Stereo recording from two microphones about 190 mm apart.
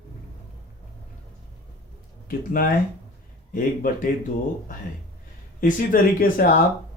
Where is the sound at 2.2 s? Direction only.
50° left (ahead or behind).